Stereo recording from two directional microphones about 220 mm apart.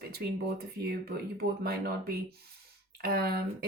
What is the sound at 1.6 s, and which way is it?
Speech, 45° right (ahead or behind).